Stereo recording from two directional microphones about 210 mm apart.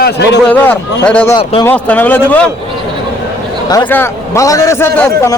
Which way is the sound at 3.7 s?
15° left (ahead or behind).